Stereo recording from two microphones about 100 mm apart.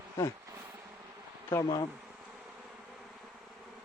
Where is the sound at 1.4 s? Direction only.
25° left (ahead or behind).